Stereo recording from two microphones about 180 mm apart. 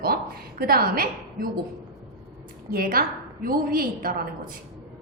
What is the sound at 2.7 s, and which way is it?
A woman's voice, 55° right (ahead or behind).